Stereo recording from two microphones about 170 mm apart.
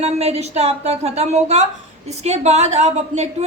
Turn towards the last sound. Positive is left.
turn(degrees=-40)  # may be behind; listen again after turning